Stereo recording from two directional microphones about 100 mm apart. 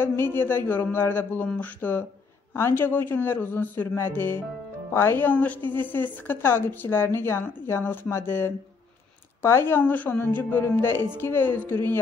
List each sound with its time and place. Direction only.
0.0 s a woman's voice: 20° left (ahead or behind)
5.6 s a woman's voice: 50° right (ahead or behind)
5.9 s a woman's voice: 20° left (ahead or behind)